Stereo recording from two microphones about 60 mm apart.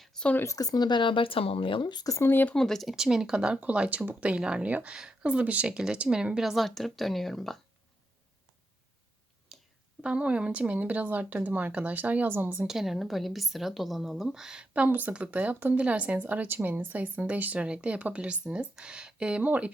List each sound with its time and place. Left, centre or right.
0.0 s a sound: centre
0.4 s speech: left
2.2 s speech: left
2.6 s speech: centre
2.9 s speech: centre
3.6 s speech: right
4.3 s speech: centre
9.5 s a sound: centre
10.0 s speech: centre; by 12.6 s right
12.6 s speech: centre
14.6 s speech: right
19.4 s speech: right